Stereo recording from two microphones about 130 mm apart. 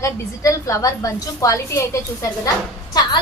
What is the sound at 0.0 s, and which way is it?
A woman's voice, 25° left (ahead or behind).